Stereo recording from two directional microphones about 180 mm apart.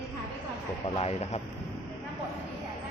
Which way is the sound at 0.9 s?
35° left (ahead or behind).